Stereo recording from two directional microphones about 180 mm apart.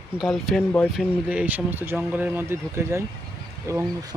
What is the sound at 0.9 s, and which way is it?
Speech, 5° right (ahead or behind).